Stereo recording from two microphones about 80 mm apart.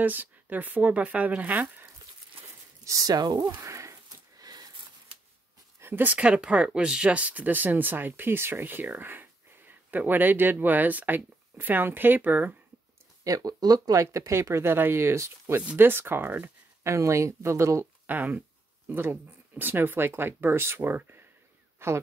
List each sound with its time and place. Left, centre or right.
0.0 s speech: right
2.8 s speech: right
3.6 s a sound: right
4.4 s a sound: right
5.8 s speech: right
13.2 s speech: right
16.8 s speech: right
18.0 s speech: right